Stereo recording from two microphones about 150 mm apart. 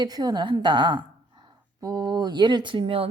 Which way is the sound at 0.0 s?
25° right (ahead or behind).